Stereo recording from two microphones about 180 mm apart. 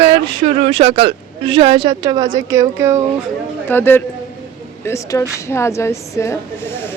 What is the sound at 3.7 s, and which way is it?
A woman's voice, 10° left (ahead or behind).